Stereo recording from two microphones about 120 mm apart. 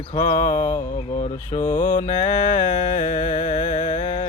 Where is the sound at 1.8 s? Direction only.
90° left.